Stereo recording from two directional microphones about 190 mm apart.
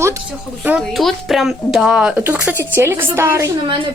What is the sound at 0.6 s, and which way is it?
A woman's voice, 5° right (ahead or behind).